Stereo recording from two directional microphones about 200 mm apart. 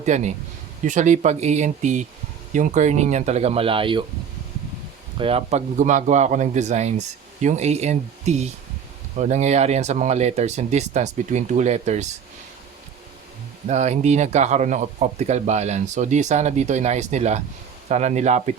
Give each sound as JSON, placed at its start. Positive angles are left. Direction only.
{"t": 0.0, "sound": "speech", "side_deg": -35}
{"t": 5.1, "sound": "speech", "side_deg": -30}
{"t": 13.7, "sound": "speech", "side_deg": -35}